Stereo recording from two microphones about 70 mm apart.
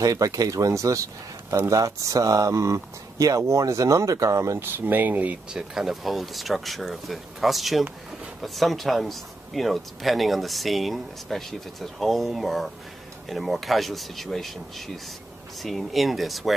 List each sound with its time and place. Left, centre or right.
0.0 s speech: right
4.6 s speech: right
5.5 s speech: centre